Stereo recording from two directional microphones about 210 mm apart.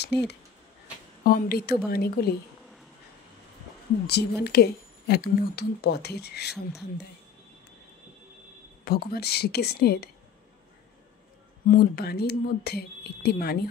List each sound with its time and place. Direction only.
0.1 s speech: 50° left (ahead or behind)
4.1 s speech: 50° left (ahead or behind)
8.8 s speech: 45° left (ahead or behind)
11.6 s speech: 45° left (ahead or behind)